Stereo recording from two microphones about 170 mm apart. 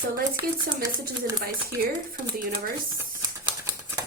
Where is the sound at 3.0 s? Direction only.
20° right (ahead or behind).